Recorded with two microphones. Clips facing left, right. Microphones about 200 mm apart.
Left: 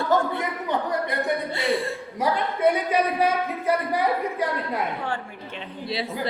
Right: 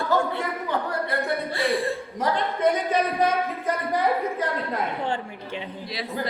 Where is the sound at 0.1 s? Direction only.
20° left (ahead or behind).